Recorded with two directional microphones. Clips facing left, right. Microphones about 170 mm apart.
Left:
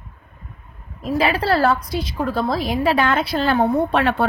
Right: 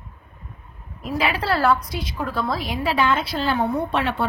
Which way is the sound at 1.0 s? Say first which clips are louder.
Left 4 dB; 40° left (ahead or behind).